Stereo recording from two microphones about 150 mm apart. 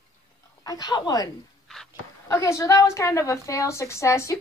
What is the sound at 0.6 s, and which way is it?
Speech, 25° left (ahead or behind).